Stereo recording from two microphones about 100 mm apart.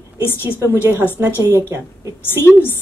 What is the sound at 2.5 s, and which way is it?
Speech, 25° left (ahead or behind).